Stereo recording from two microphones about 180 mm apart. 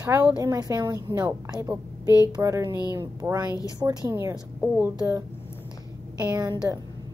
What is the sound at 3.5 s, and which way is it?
Speech, 20° left (ahead or behind).